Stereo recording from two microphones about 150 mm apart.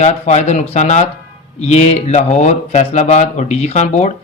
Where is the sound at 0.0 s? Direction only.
50° left (ahead or behind).